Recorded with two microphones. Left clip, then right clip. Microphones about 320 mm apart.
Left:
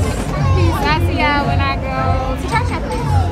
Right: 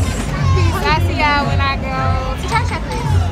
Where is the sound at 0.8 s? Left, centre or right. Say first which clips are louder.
Right 2 dB; centre.